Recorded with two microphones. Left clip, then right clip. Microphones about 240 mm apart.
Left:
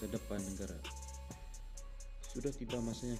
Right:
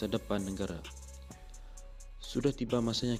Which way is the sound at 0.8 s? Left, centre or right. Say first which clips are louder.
Left 1 dB; centre.